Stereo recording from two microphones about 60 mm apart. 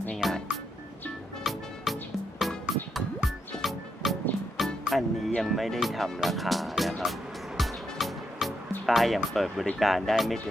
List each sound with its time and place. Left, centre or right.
0.2 s music: centre
1.5 s music: centre
3.6 s music: centre
5.4 s speech: centre
7.0 s music: centre
8.9 s speech: centre